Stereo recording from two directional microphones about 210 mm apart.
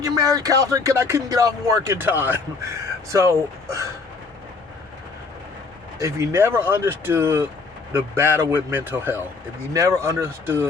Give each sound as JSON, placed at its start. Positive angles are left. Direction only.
{"t": 0.0, "sound": "speech", "side_deg": -15}
{"t": 6.0, "sound": "speech", "side_deg": -15}